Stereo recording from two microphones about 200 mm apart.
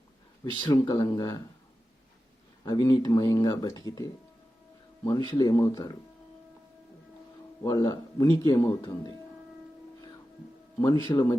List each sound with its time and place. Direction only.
0.6 s speech: 20° left (ahead or behind)
2.6 s speech: 20° left (ahead or behind)
7.6 s speech: 15° left (ahead or behind)
11.0 s speech: 15° left (ahead or behind)